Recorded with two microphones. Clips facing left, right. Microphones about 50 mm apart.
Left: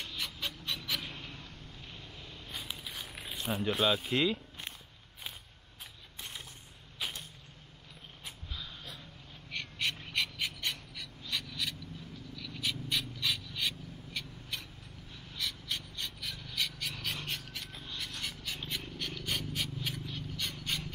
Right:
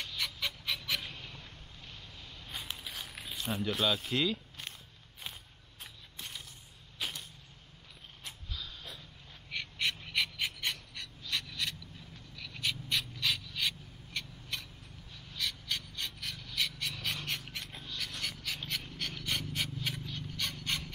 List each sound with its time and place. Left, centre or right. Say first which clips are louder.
0.0 s music: right 2 dB; centre
2.4 s biting: right 1 dB; centre
3.6 s speech: left 2 dB; centre
7.0 s a sound: even; centre
8.2 s snort: even; centre
9.5 s frog: right 1 dB; centre
12.4 s a sound: right 1 dB; centre
15.3 s gasp: right 1 dB; centre
16.9 s a sound: right 1 dB; centre